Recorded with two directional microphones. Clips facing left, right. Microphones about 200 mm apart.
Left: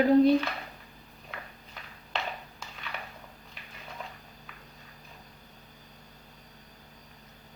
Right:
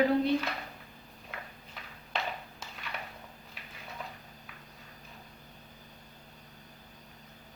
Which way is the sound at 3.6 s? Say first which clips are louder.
Left 1 dB; 5° right (ahead or behind).